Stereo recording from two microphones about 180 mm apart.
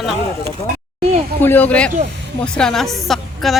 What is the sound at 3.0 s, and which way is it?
Speech, centre (ahead or behind).